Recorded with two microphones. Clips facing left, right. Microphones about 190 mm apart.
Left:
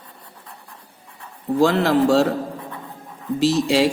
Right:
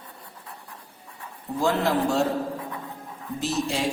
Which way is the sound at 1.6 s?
85° left.